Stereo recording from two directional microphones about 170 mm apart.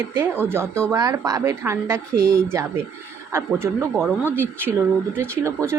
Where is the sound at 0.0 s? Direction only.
15° right (ahead or behind).